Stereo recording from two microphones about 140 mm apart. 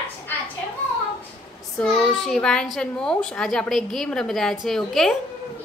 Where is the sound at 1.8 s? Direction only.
5° left (ahead or behind).